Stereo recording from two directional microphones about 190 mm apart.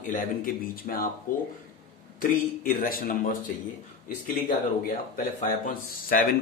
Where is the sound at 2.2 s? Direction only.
45° left (ahead or behind).